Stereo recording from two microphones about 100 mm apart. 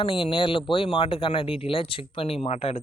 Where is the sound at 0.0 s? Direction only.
55° left (ahead or behind).